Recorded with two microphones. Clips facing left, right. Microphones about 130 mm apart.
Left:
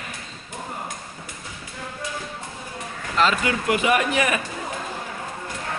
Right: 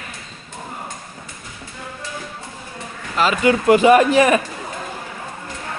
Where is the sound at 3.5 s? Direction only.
35° right (ahead or behind).